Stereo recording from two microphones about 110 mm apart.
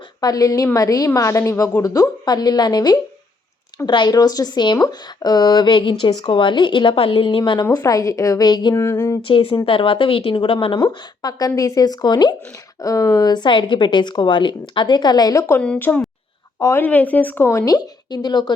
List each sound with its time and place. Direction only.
0.2 s speech: 35° left (ahead or behind)
9.2 s a woman's voice: 50° left (ahead or behind)
10.8 s speech: 35° left (ahead or behind)
15.8 s a woman's voice: 20° left (ahead or behind)
16.8 s speech: 15° left (ahead or behind)
17.7 s speech: 40° left (ahead or behind)